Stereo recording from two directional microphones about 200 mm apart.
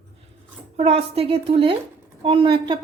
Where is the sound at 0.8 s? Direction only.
30° right (ahead or behind).